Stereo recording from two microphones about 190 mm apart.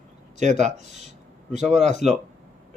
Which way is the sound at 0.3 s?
40° right (ahead or behind).